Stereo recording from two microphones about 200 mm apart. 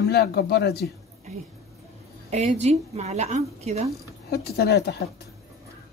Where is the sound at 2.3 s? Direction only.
35° right (ahead or behind).